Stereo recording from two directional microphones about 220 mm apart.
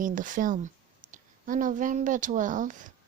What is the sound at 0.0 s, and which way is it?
Speech, 35° right (ahead or behind).